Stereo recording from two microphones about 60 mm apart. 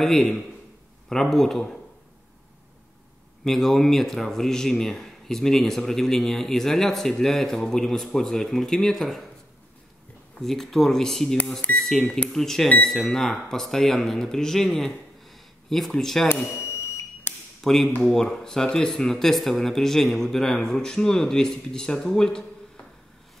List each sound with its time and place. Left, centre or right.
0.0 s speech: centre
3.4 s speech: centre
10.4 s speech: centre
12.0 s speech: left
12.3 s speech: centre
17.6 s tap: centre
18.0 s speech: centre